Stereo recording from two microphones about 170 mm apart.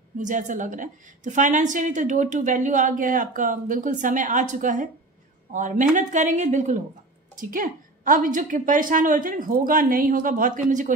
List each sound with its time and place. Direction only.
0.2 s a woman's voice: 50° right (ahead or behind)